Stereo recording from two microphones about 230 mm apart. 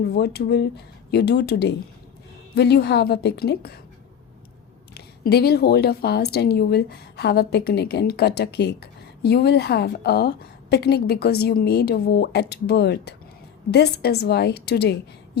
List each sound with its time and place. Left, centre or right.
0.1 s a woman's voice: left
4.9 s a woman's voice: left